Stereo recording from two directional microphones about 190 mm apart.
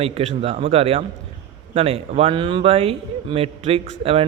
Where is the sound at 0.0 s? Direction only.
30° right (ahead or behind).